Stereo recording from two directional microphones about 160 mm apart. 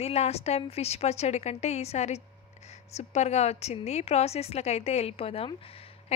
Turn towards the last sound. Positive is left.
turn(degrees=35)  # may be behind; listen again after turning